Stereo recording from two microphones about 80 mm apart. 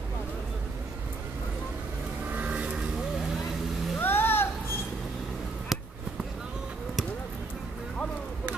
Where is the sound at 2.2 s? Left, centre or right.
Centre.